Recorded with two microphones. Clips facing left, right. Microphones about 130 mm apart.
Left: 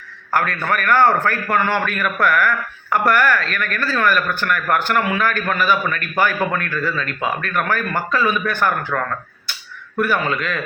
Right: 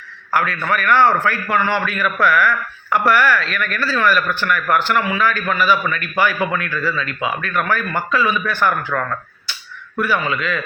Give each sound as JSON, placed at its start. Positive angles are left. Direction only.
{"t": 0.3, "sound": "speech", "side_deg": 50}
{"t": 10.0, "sound": "speech", "side_deg": 45}